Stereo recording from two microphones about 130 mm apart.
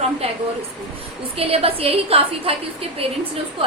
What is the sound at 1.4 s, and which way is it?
A woman's voice, 50° right (ahead or behind).